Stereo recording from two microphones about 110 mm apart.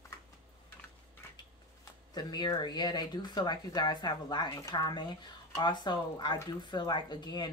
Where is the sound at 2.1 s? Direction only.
40° left (ahead or behind).